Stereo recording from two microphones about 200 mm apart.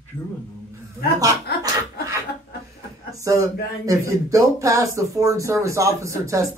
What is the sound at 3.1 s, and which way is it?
Speech, 15° right (ahead or behind).